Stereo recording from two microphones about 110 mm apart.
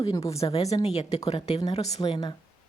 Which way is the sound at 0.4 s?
50° left (ahead or behind).